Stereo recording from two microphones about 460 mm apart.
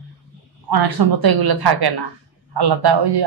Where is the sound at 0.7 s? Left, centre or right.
Right.